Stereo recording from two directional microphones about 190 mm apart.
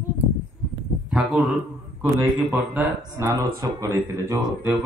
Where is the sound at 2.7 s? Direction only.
15° right (ahead or behind).